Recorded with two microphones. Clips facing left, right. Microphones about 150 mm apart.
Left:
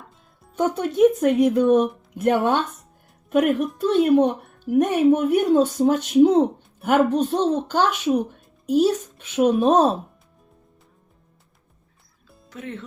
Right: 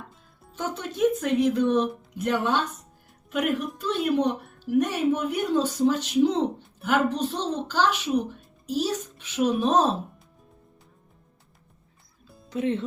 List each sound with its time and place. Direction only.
0.5 s a woman's voice: 50° left (ahead or behind)
12.5 s speech: 20° right (ahead or behind)